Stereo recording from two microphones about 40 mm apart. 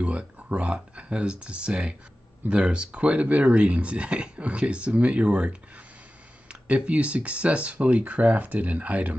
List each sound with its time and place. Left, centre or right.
0.2 s speech: right